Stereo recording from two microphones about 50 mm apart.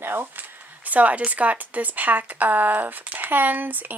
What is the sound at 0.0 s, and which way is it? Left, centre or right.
Speech, right.